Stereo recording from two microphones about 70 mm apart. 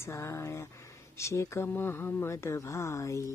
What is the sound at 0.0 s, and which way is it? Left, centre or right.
Speech, left.